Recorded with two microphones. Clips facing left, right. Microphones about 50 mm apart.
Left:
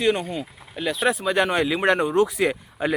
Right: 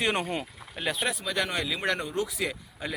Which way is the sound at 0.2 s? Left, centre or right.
Right.